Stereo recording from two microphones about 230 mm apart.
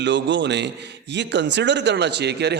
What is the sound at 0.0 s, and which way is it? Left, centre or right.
A man's voice, right.